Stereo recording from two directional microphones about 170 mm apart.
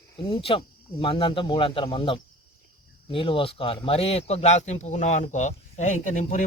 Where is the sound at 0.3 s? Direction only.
30° left (ahead or behind).